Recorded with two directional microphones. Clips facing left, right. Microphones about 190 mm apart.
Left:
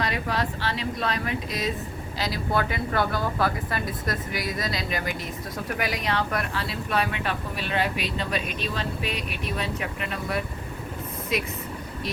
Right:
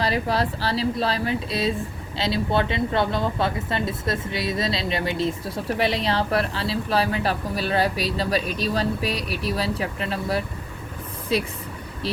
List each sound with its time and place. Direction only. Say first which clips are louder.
0.0 s speech: right 4 dB; 35° right (ahead or behind)